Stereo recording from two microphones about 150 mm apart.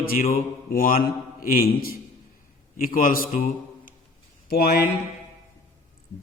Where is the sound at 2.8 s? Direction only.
70° left (ahead or behind).